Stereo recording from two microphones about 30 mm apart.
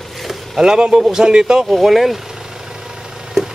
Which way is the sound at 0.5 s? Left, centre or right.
Right.